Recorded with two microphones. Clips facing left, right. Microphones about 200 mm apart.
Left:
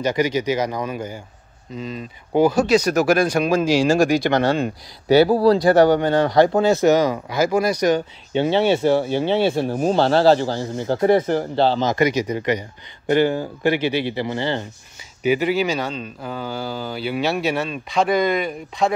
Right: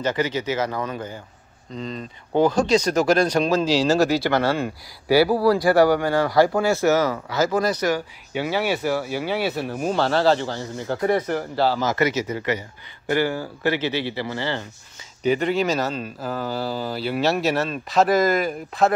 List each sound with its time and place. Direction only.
0.0 s speech: 15° left (ahead or behind)
15.2 s speech: 5° left (ahead or behind)